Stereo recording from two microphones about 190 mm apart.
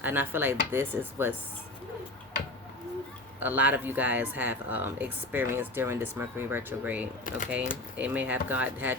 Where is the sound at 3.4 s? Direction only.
10° right (ahead or behind).